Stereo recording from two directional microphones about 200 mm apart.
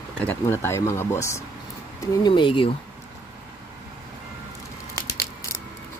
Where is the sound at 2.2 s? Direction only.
25° left (ahead or behind).